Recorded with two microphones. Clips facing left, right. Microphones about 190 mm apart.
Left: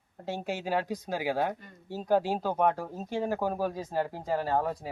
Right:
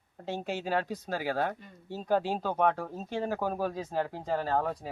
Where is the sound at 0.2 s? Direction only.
10° left (ahead or behind).